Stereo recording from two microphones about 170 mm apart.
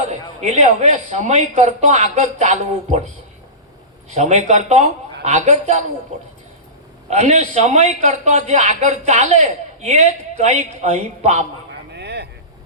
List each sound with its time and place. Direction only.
0.4 s a man's voice: 40° right (ahead or behind)
4.1 s a man's voice: 40° right (ahead or behind)
7.1 s a man's voice: 40° right (ahead or behind)
11.9 s vehicle: 80° right